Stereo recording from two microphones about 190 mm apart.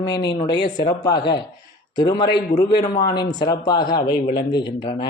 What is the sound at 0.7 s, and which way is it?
Speech, 20° left (ahead or behind).